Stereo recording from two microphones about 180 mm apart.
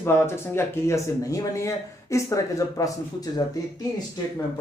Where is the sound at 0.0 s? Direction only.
15° left (ahead or behind).